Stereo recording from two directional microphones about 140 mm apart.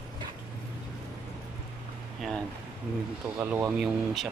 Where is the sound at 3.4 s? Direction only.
10° right (ahead or behind).